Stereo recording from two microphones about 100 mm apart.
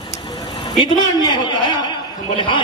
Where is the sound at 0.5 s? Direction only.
40° left (ahead or behind).